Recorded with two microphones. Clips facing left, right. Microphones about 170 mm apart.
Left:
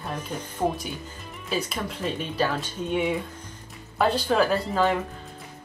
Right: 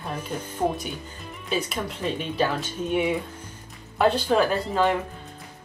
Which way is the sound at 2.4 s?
5° right (ahead or behind).